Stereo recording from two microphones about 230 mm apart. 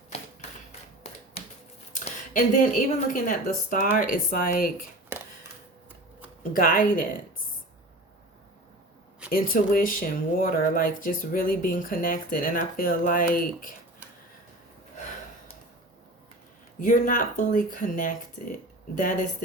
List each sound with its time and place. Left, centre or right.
1.9 s speech: left
5.1 s a sound: centre
6.5 s speech: left
9.3 s speech: left
16.8 s speech: left